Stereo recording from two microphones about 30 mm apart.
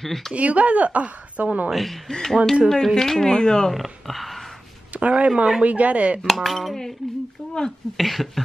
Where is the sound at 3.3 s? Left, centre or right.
Left.